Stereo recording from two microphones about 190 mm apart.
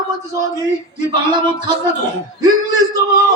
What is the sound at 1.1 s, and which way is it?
Speech, 25° right (ahead or behind).